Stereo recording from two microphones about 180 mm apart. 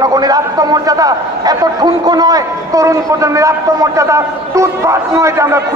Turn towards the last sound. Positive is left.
turn(degrees=-15)  # may be behind; listen again after turning